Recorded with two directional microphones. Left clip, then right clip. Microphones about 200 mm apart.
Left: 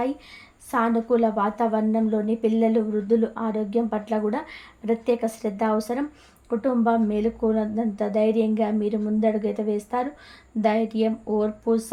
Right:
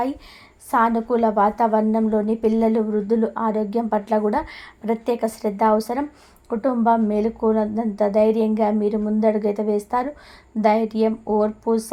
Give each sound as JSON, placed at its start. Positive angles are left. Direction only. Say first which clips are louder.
{"t": 0.7, "sound": "a woman's voice", "louder": "right 3 dB", "side_deg": -20}